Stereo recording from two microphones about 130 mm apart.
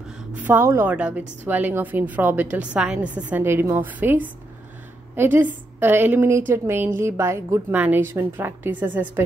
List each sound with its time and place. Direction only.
0.3 s a woman's voice: 15° right (ahead or behind)